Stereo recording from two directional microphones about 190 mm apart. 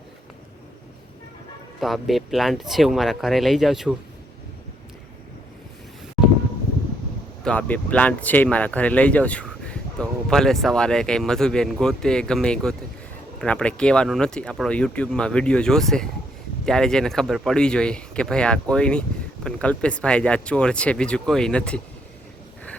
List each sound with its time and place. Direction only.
1.8 s speech: centre (ahead or behind)
7.4 s speech: 5° left (ahead or behind)